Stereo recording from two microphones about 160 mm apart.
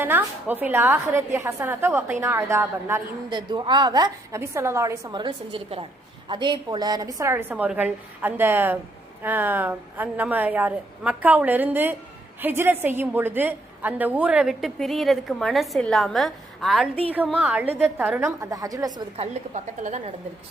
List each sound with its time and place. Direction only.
0.0 s a woman's voice: 10° right (ahead or behind)
3.2 s a woman's voice: 30° right (ahead or behind); by 16.9 s centre (ahead or behind)
17.3 s a woman's voice: 10° right (ahead or behind)
19.1 s a woman's voice: 45° right (ahead or behind)